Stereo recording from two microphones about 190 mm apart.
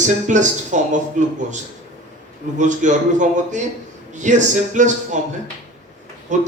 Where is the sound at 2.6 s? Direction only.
40° right (ahead or behind).